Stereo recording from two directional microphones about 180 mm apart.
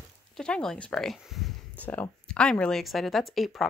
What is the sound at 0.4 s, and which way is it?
A woman's voice, 5° left (ahead or behind).